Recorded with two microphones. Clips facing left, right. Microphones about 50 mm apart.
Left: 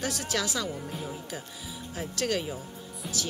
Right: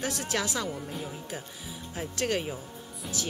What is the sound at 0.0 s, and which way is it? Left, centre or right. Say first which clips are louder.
Speech: even; right.